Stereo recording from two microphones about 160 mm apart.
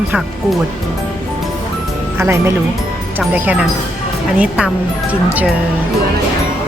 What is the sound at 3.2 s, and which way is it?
Speech, 5° right (ahead or behind).